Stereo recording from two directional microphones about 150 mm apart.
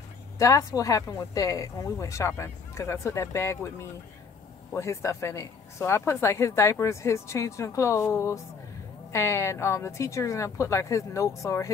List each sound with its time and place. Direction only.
0.4 s speech: 20° left (ahead or behind)